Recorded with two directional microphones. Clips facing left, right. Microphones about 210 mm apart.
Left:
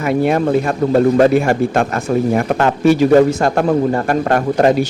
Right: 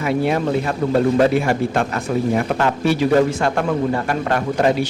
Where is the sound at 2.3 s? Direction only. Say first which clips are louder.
Left 3 dB; 45° left (ahead or behind).